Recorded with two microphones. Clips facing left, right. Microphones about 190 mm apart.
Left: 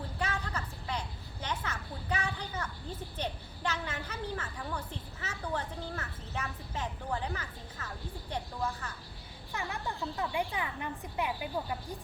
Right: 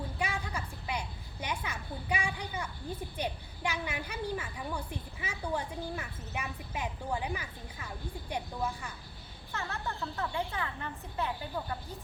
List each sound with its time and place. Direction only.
0.2 s a sound: 10° right (ahead or behind)
3.2 s a child's voice: 10° right (ahead or behind)
9.5 s speech: 15° left (ahead or behind)